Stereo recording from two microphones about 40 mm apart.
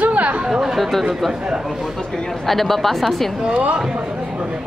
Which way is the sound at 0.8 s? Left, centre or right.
Centre.